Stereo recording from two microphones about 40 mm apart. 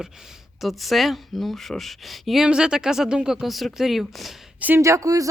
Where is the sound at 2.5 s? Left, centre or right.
Right.